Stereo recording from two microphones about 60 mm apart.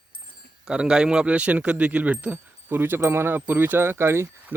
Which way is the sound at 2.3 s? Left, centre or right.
Right.